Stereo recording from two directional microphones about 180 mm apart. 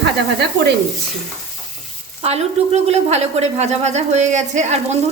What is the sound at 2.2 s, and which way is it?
A woman's voice, 35° right (ahead or behind).